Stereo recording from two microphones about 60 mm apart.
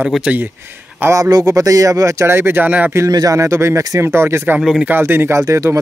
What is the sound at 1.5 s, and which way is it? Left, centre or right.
Speech, right.